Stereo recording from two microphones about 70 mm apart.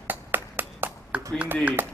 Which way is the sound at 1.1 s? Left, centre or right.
Centre.